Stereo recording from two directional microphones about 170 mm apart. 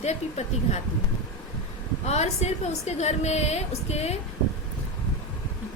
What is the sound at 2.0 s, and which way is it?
A woman's voice, 40° left (ahead or behind).